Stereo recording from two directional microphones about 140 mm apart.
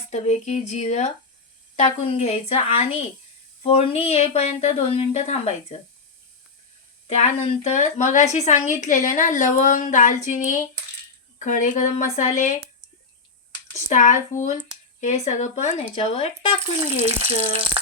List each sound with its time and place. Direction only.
0.1 s a woman's voice: 55° left (ahead or behind)
7.1 s a woman's voice: 50° left (ahead or behind)
13.7 s a woman's voice: 60° left (ahead or behind); by 16.6 s 40° left (ahead or behind)